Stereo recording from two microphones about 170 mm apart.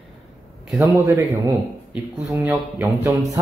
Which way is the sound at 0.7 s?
15° right (ahead or behind).